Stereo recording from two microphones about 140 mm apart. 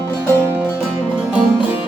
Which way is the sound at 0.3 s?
15° right (ahead or behind).